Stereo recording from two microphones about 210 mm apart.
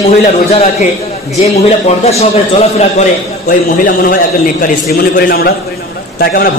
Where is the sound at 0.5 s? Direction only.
30° left (ahead or behind).